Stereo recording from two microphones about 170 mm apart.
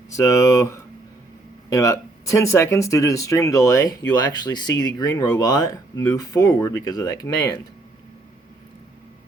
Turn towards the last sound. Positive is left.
turn(degrees=20)  # may be behind; listen again after turning